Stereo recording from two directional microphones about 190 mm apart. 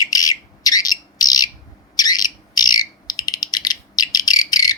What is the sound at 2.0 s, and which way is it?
Bird, 20° left (ahead or behind).